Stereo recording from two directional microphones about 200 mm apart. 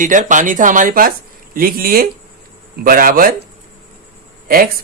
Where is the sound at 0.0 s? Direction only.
40° right (ahead or behind).